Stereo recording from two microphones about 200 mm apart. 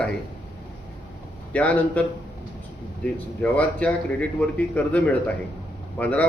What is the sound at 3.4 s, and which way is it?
Speech, 5° left (ahead or behind).